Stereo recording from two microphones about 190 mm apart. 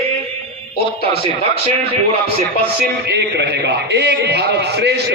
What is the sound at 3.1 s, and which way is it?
A man's voice, 60° right (ahead or behind).